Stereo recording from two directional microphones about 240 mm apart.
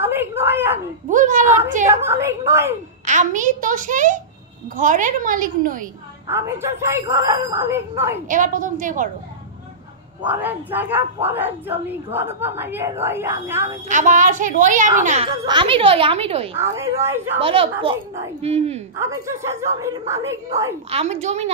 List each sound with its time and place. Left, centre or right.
0.0 s a sound: centre
1.0 s a sound: right
2.0 s a woman's voice: centre
3.1 s a woman's voice: right
6.2 s a woman's voice: centre
8.3 s a woman's voice: right
10.2 s a woman's voice: centre
13.8 s a woman's voice: right
15.4 s speech: right
16.5 s a woman's voice: centre
17.4 s speech: right
18.9 s a woman's voice: centre
20.9 s speech: right